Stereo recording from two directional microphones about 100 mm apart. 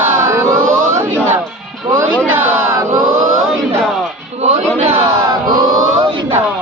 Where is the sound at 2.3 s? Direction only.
20° right (ahead or behind).